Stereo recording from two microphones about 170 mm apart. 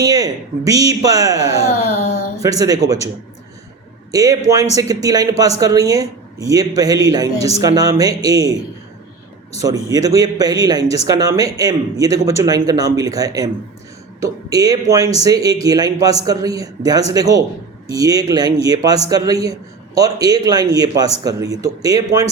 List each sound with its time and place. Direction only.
0.0 s a man's voice: 20° right (ahead or behind)
2.4 s a man's voice: 20° right (ahead or behind)
4.1 s a man's voice: 20° right (ahead or behind)
9.6 s a man's voice: 20° right (ahead or behind)